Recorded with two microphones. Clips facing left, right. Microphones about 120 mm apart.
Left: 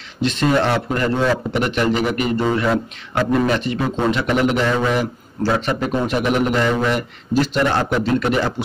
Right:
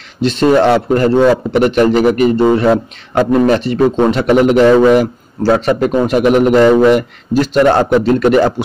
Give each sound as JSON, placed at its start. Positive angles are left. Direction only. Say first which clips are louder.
{"t": 0.2, "sound": "a man's voice", "louder": "right 7 dB", "side_deg": -35}
{"t": 5.4, "sound": "speech", "louder": "right 8 dB", "side_deg": -30}
{"t": 6.0, "sound": "a man's voice", "louder": "right 9 dB", "side_deg": -45}